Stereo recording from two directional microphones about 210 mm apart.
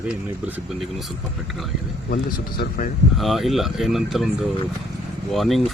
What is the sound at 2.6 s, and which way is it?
Speech, 40° left (ahead or behind).